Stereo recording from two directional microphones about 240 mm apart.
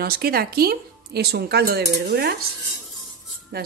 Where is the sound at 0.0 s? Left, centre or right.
Right.